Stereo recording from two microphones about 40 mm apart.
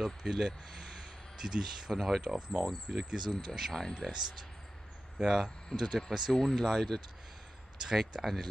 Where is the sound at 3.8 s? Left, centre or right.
Centre.